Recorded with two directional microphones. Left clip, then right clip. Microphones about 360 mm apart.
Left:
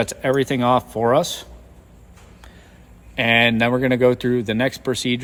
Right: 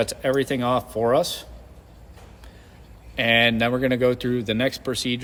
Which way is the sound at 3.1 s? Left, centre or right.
Centre.